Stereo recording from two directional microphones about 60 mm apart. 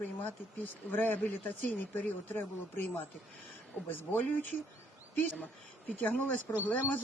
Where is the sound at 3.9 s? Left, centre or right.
Left.